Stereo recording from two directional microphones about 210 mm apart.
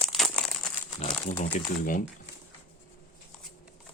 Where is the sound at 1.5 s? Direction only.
35° left (ahead or behind).